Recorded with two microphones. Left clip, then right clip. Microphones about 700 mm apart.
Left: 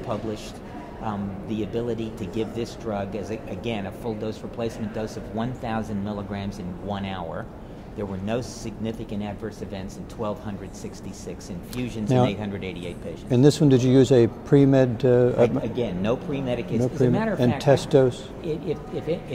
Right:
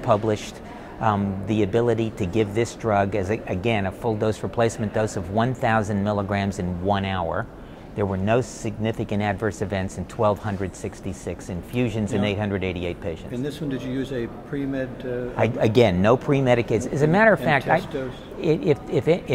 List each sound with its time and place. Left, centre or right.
0.0 s speech: right
13.3 s speech: left
15.7 s speech: right
18.0 s speech: left
18.4 s speech: right